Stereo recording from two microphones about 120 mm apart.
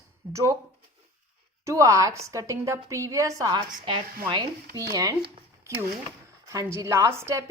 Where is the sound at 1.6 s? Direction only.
30° right (ahead or behind).